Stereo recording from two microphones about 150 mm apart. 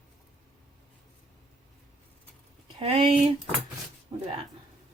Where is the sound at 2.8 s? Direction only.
40° right (ahead or behind).